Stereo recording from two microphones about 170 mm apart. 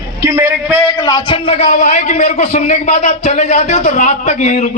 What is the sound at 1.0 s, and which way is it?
Speech, 25° left (ahead or behind).